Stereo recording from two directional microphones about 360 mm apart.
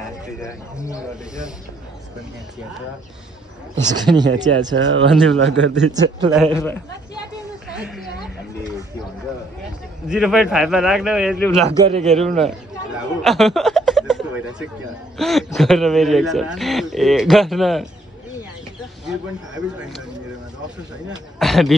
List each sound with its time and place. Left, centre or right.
0.4 s speech: centre
4.2 s a man's voice: centre
4.7 s a man's voice: right
6.3 s speech: centre
10.0 s speech: centre
11.8 s a man's voice: centre
12.4 s speech: centre
19.0 s speech: centre
21.4 s speech: centre